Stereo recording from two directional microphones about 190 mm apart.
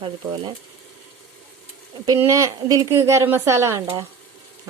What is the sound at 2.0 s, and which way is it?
A woman's voice, 15° right (ahead or behind).